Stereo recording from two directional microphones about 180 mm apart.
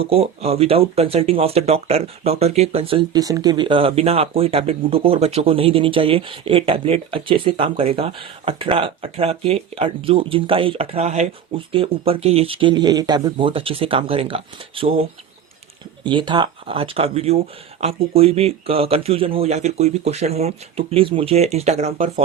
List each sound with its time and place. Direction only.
0.0 s speech: 35° right (ahead or behind)
16.0 s speech: 25° right (ahead or behind)